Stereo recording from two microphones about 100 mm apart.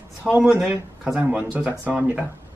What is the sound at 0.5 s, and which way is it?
Speech, 15° right (ahead or behind).